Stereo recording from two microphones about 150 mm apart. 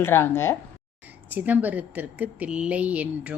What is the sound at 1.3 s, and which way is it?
Speech, 10° right (ahead or behind).